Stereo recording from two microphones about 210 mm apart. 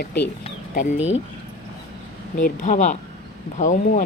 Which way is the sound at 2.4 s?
35° left (ahead or behind).